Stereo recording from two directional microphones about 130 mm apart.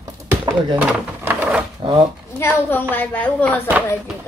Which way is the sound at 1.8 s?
40° right (ahead or behind).